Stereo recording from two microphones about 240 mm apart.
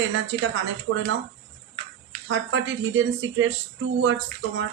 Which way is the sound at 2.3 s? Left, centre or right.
Right.